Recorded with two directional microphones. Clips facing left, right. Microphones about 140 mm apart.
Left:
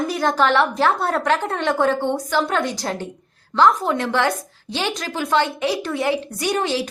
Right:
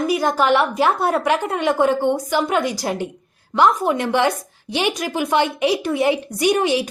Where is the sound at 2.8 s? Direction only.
15° right (ahead or behind).